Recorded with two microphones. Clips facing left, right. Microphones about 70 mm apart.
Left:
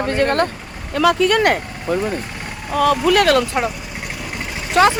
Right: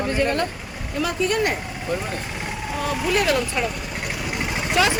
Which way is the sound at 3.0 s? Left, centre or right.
Left.